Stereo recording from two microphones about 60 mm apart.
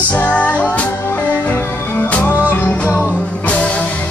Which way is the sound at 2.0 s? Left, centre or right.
Left.